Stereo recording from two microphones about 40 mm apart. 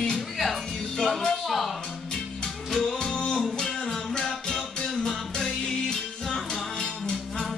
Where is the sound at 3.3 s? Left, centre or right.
Centre.